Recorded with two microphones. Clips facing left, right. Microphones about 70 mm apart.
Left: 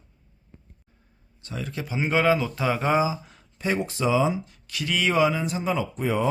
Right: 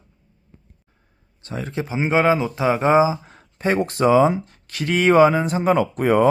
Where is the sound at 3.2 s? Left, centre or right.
Right.